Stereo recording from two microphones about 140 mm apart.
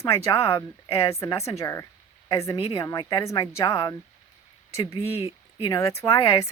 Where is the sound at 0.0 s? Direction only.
20° left (ahead or behind).